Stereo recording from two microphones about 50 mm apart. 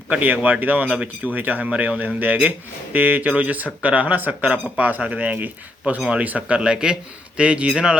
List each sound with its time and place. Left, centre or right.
0.2 s speech: right
6.6 s speech: centre